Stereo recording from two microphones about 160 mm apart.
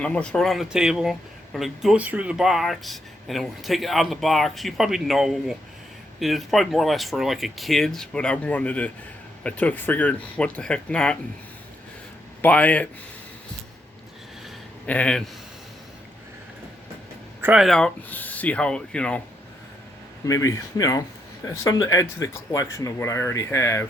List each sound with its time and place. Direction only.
0.0 s speech: 5° left (ahead or behind)
12.4 s speech: 10° left (ahead or behind)
14.8 s speech: 10° left (ahead or behind)
17.4 s speech: 5° right (ahead or behind)
20.2 s speech: 20° left (ahead or behind)